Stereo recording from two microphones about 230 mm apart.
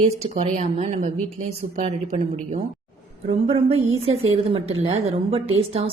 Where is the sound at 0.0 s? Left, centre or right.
Right.